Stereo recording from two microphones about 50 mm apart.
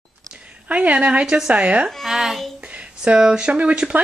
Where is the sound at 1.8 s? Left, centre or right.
Centre.